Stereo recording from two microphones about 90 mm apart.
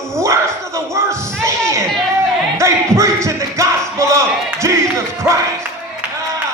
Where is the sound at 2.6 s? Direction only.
35° right (ahead or behind).